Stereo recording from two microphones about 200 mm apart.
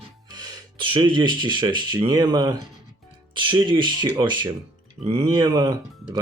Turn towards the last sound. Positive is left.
turn(degrees=-20)  # may be behind; listen again after turning